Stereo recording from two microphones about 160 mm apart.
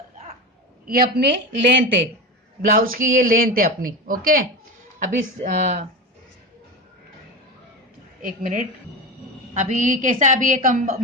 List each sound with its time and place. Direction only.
0.9 s speech: 70° right (ahead or behind); by 1.7 s 90° right
2.6 s speech: 60° right (ahead or behind)
4.9 s a woman's voice: 45° right (ahead or behind)
8.2 s a woman's voice: 55° right (ahead or behind)